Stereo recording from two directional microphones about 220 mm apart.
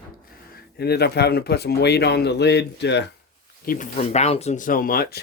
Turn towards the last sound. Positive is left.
turn(degrees=45)  # may be behind; listen again after turning